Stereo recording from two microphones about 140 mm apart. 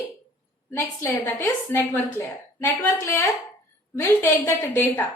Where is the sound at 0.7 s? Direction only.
20° left (ahead or behind).